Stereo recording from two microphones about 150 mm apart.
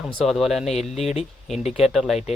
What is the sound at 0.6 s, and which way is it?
Speech, 45° left (ahead or behind).